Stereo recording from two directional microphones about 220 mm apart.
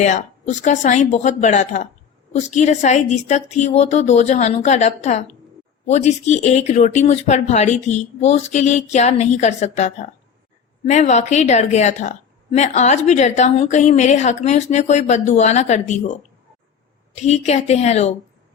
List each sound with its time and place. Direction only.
0.0 s a woman's voice: 35° left (ahead or behind)
17.2 s a woman's voice: 30° left (ahead or behind)